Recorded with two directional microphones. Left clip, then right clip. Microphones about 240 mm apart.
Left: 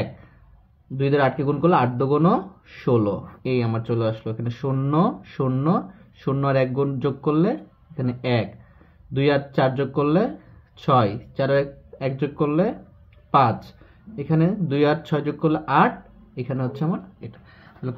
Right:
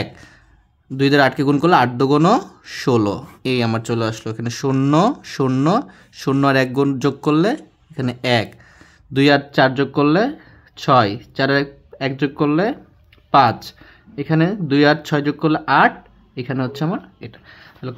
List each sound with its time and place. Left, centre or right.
0.9 s speech: right